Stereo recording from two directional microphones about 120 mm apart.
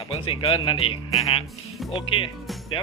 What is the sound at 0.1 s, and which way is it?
Speech, 55° left (ahead or behind).